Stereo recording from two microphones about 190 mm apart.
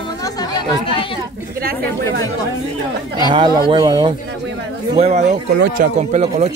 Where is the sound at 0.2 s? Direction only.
20° left (ahead or behind).